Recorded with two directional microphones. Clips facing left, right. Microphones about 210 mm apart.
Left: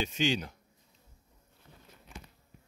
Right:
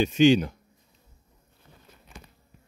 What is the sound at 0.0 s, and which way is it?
Speech, 60° right (ahead or behind).